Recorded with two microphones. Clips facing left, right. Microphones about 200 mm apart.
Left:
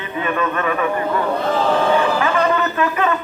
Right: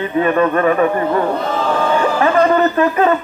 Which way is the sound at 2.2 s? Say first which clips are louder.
Right 5 dB; 35° right (ahead or behind).